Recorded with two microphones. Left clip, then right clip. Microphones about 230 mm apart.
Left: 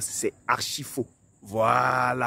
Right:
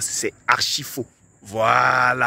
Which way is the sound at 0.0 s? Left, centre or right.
Centre.